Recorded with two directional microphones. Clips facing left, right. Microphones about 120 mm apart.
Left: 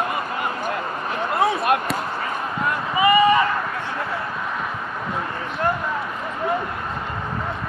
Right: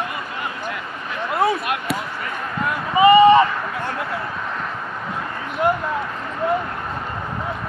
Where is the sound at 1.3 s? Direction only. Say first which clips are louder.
Right 2 dB; centre (ahead or behind).